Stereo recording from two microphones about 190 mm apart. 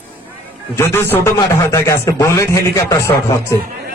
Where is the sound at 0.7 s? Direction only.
15° left (ahead or behind).